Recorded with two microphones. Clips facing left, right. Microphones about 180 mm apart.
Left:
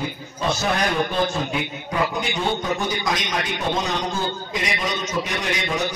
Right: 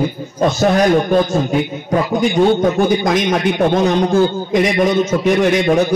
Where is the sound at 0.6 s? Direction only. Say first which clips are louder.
Right 11 dB; 45° right (ahead or behind).